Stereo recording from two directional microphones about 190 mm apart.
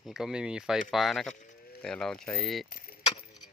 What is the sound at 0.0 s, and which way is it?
Speech, centre (ahead or behind).